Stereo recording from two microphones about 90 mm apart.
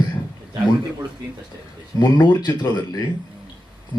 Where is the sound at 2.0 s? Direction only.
55° left (ahead or behind).